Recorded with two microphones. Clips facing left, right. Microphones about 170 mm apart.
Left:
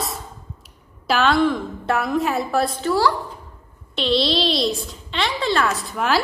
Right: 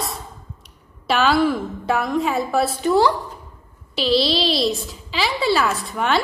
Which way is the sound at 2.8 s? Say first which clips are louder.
Right 5 dB; 20° right (ahead or behind).